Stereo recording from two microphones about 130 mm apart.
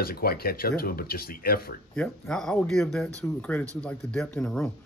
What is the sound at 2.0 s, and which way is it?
Speech, 5° left (ahead or behind).